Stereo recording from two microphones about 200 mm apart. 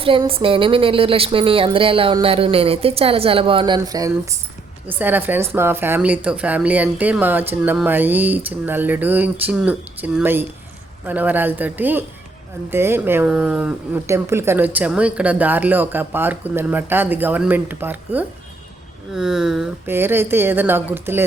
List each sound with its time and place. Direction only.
0.0 s speech: 25° right (ahead or behind); by 21.2 s 10° right (ahead or behind)